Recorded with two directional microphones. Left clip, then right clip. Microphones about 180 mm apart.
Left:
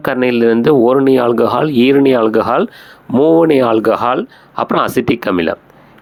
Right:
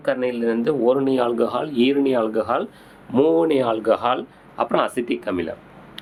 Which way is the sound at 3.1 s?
25° left (ahead or behind).